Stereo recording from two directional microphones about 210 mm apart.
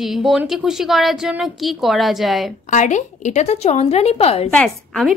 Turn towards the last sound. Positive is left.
turn(degrees=0)  # may be behind; listen again after turning